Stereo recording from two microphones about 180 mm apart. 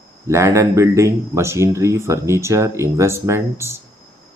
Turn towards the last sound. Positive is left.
turn(degrees=-15)  # may be behind; listen again after turning